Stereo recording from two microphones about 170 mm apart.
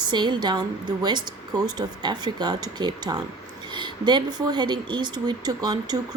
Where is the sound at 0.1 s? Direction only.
25° right (ahead or behind).